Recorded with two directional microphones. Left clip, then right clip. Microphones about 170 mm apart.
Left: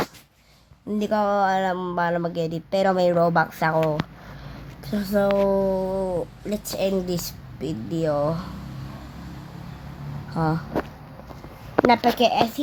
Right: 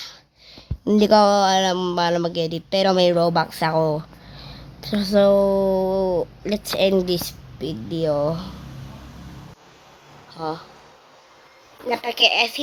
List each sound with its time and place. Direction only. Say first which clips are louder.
0.9 s speech: right 8 dB; 40° right (ahead or behind)
11.9 s speech: right 1 dB; 15° right (ahead or behind)